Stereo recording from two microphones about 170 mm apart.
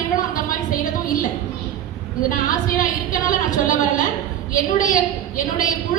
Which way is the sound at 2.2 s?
55° left (ahead or behind).